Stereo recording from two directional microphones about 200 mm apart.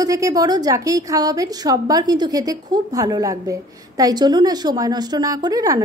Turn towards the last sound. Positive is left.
turn(degrees=-20)  # may be behind; listen again after turning